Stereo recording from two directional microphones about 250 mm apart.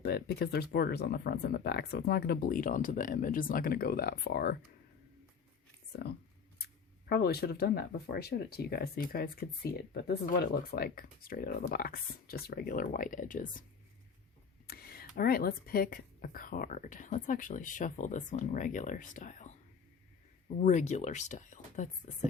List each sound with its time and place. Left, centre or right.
0.0 s speech: left
5.9 s speech: left
14.7 s speech: left
20.6 s speech: left